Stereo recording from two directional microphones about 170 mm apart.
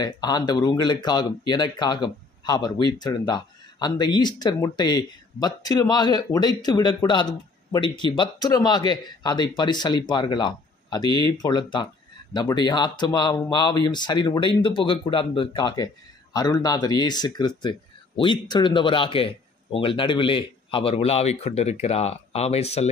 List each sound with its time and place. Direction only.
0.0 s speech: 25° left (ahead or behind)